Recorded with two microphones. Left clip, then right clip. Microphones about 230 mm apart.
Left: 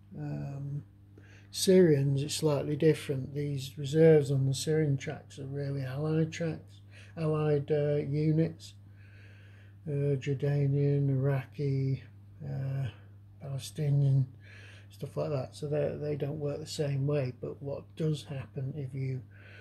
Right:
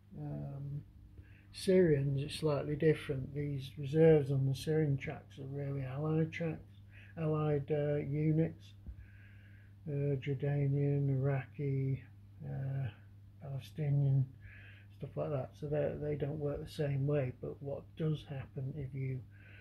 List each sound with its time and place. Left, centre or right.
0.2 s a sound: centre
1.5 s speech: centre
9.8 s speech: centre